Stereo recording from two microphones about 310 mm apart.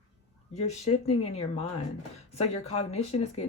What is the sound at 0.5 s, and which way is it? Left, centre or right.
Speech, left.